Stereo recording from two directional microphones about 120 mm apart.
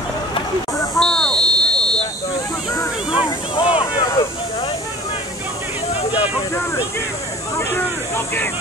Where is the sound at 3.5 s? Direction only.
45° left (ahead or behind).